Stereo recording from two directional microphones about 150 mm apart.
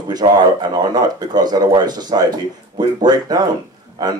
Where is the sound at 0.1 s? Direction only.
30° right (ahead or behind).